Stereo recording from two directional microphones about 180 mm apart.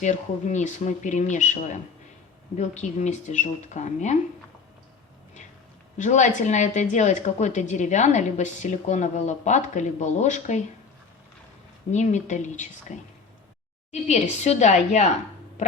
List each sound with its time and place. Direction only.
0.0 s a woman's voice: 40° left (ahead or behind)
6.0 s a woman's voice: 40° left (ahead or behind)
11.9 s a woman's voice: 40° left (ahead or behind)